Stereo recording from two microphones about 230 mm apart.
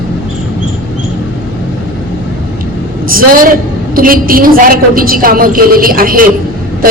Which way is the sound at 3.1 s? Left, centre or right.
Right.